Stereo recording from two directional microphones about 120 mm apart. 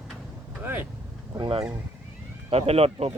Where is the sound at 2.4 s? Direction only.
55° right (ahead or behind).